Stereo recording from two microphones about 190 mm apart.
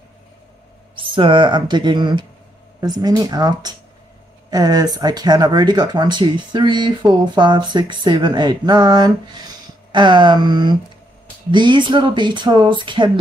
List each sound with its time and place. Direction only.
0.9 s speech: 25° right (ahead or behind)